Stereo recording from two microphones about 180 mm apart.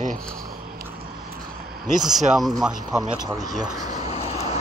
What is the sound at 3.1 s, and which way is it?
Speech, 20° right (ahead or behind).